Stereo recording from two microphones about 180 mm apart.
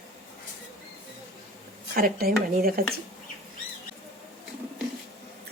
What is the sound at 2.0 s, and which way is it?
Speech, 55° right (ahead or behind).